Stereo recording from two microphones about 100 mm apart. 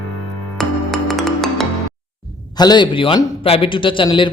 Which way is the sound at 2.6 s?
45° left (ahead or behind).